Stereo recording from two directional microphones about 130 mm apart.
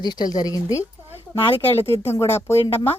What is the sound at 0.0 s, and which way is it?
Speech, 35° left (ahead or behind).